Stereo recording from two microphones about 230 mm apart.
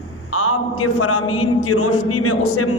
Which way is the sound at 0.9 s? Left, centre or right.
Left.